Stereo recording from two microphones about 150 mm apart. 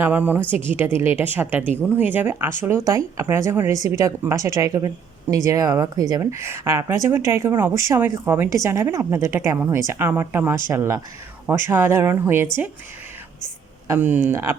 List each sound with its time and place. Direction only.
0.0 s a woman's voice: 10° right (ahead or behind)
13.8 s a woman's voice: 10° right (ahead or behind)